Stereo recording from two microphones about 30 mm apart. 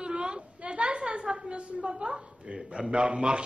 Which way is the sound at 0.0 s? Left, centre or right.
Right.